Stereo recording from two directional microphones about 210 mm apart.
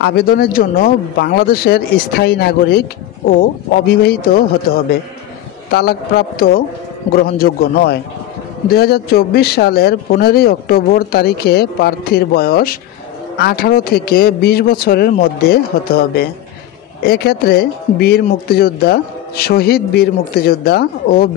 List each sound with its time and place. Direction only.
0.0 s speech: 50° left (ahead or behind)